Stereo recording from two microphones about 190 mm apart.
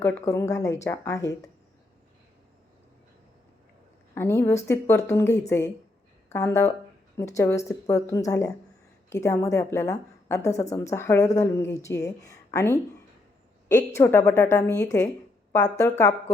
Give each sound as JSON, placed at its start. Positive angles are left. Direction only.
{"t": 0.0, "sound": "a woman's voice", "side_deg": 15}
{"t": 4.1, "sound": "a woman's voice", "side_deg": 10}